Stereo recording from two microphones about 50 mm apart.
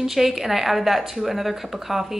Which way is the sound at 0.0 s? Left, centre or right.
Centre.